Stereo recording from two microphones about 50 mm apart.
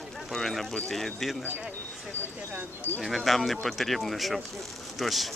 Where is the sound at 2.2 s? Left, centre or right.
Right.